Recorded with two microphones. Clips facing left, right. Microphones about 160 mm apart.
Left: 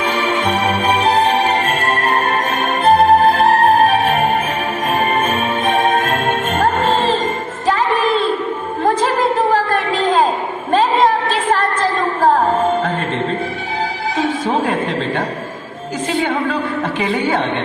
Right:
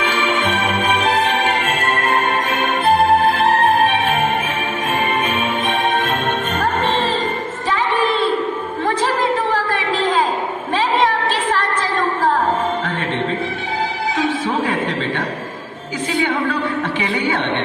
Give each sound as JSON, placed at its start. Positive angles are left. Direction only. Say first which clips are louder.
{"t": 0.0, "sound": "music", "louder": "left 2 dB", "side_deg": 40}